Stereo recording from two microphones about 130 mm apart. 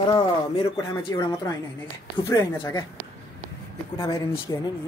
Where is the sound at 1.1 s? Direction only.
25° left (ahead or behind).